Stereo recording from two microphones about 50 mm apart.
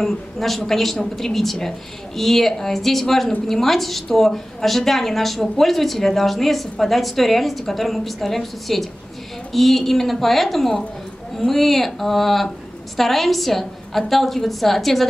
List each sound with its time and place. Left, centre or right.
0.0 s a woman's voice: centre